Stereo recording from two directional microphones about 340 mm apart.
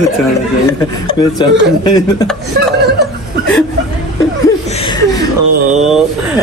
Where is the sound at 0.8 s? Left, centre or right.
Centre.